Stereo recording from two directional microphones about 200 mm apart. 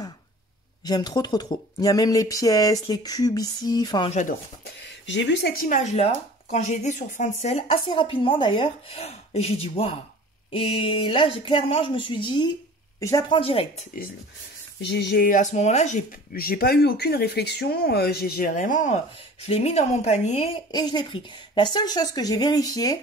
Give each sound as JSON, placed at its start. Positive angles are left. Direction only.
{"t": 0.8, "sound": "speech", "side_deg": 20}
{"t": 5.0, "sound": "speech", "side_deg": 60}
{"t": 5.7, "sound": "speech", "side_deg": 35}
{"t": 14.8, "sound": "speech", "side_deg": 55}
{"t": 20.7, "sound": "speech", "side_deg": 20}